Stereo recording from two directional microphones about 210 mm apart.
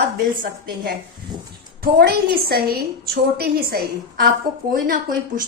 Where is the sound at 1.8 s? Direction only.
45° right (ahead or behind).